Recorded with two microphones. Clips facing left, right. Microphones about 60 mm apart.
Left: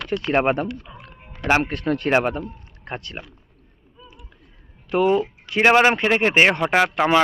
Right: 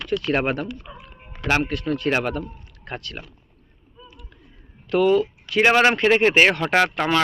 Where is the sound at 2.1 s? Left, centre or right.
Left.